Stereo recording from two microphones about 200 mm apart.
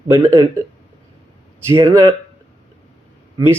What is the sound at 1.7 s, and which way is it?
Speech, 15° right (ahead or behind).